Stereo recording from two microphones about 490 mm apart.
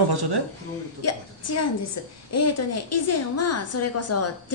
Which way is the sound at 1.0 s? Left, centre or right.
Left.